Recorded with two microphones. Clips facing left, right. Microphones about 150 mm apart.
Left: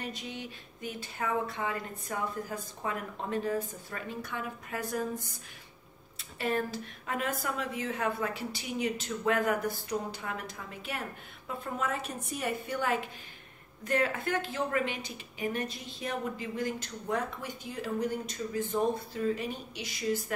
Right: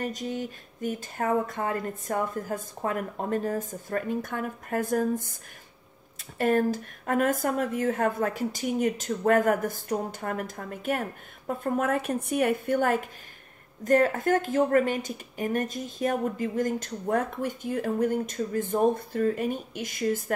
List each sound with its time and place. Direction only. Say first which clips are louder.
0.0 s a woman's voice: right 8 dB; 45° right (ahead or behind)